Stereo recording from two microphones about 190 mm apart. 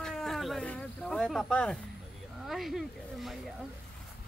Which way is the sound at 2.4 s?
Centre (ahead or behind).